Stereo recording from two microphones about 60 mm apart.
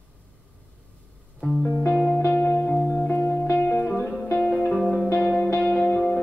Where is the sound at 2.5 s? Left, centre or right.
Centre.